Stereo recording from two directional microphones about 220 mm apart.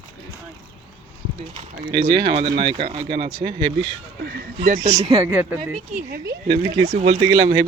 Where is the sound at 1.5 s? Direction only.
20° right (ahead or behind).